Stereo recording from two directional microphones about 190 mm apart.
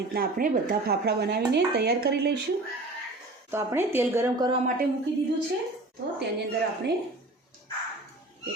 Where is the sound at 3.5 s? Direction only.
15° right (ahead or behind).